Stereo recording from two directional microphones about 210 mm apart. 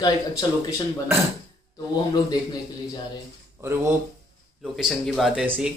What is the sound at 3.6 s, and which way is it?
Speech, 15° right (ahead or behind).